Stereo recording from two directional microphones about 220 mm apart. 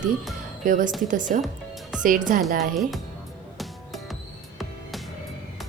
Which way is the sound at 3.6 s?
Centre (ahead or behind).